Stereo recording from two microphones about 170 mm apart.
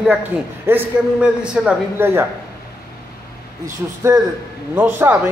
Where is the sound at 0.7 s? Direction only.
10° right (ahead or behind).